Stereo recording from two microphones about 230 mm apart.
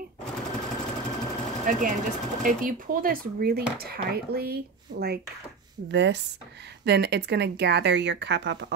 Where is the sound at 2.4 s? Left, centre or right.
Right.